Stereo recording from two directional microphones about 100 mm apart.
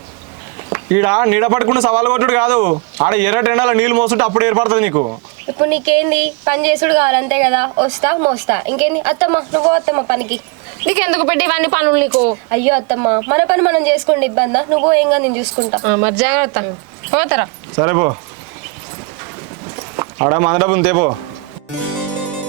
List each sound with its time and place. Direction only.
0.7 s a woman's voice: 25° right (ahead or behind)
9.4 s a woman's voice: 35° right (ahead or behind)
20.0 s a man's voice: 30° right (ahead or behind)